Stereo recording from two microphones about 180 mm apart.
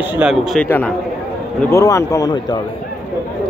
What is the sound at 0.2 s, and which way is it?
Speech, centre (ahead or behind).